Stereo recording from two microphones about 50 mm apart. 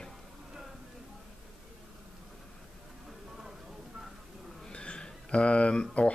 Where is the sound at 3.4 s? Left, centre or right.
Centre.